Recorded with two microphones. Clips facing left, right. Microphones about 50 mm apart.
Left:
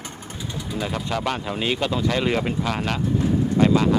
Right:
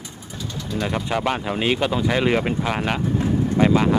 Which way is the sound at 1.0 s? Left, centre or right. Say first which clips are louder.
Right 3 dB; centre.